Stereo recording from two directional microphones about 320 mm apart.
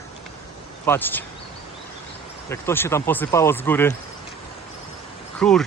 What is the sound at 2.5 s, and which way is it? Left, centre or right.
Speech, centre.